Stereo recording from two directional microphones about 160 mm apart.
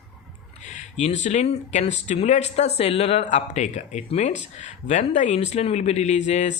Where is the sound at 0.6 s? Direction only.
50° left (ahead or behind).